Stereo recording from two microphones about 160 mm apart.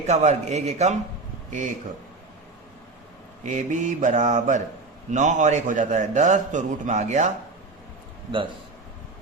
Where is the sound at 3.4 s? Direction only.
50° right (ahead or behind).